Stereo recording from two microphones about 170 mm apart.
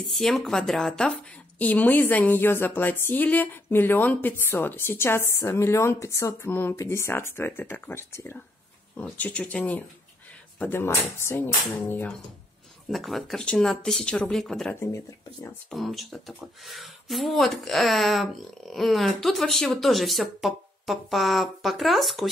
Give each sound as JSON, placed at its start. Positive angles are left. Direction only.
{"t": 0.0, "sound": "a woman's voice", "side_deg": 0}
{"t": 14.8, "sound": "a woman's voice", "side_deg": 20}
{"t": 15.7, "sound": "speech", "side_deg": 0}